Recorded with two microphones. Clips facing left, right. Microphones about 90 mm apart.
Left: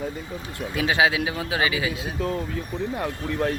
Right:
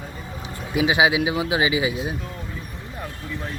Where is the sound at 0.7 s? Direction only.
15° right (ahead or behind).